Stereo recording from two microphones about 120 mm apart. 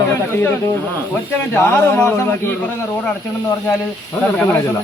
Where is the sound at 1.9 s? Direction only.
15° left (ahead or behind).